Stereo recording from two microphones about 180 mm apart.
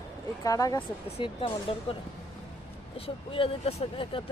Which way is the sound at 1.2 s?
30° left (ahead or behind).